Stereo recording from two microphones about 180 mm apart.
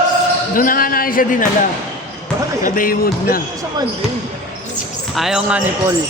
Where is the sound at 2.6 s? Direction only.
50° left (ahead or behind).